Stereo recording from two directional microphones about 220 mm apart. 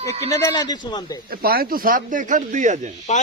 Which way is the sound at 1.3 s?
40° right (ahead or behind).